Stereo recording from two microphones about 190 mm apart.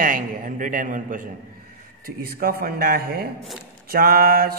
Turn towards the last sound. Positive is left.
turn(degrees=-50)  # may be behind; listen again after turning